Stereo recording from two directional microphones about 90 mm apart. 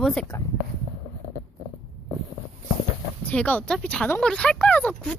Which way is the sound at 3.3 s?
15° left (ahead or behind).